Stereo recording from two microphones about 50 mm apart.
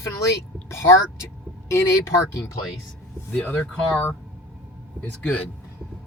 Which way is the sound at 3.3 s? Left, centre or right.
Left.